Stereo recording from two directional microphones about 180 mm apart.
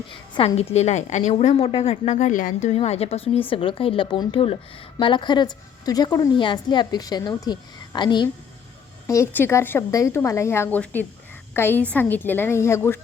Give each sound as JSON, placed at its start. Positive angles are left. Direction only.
{"t": 0.3, "sound": "a woman's voice", "side_deg": 35}